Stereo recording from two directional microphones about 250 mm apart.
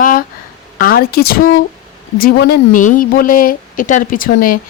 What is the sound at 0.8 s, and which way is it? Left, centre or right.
A woman's voice, left.